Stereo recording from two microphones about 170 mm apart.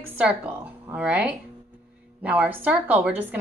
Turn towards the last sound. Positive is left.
turn(degrees=-10)  # may be behind; listen again after turning